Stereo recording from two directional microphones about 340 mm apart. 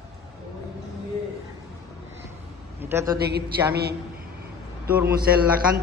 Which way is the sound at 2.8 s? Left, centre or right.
Centre.